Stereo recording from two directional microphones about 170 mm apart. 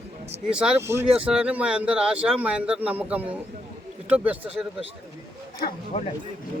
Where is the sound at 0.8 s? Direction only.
15° right (ahead or behind).